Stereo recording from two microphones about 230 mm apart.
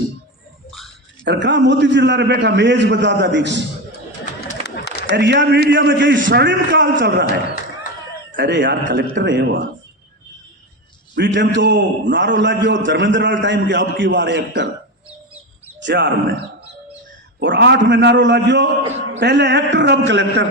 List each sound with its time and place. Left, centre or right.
1.2 s a man's voice: right
4.4 s a sound: left
5.1 s a man's voice: right
8.4 s a man's voice: right
11.1 s a man's voice: right
15.8 s a man's voice: right
17.4 s a man's voice: right